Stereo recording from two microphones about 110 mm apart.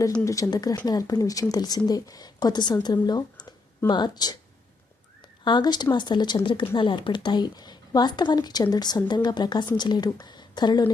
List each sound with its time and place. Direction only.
0.3 s speech: 30° left (ahead or behind)
5.5 s speech: 40° left (ahead or behind)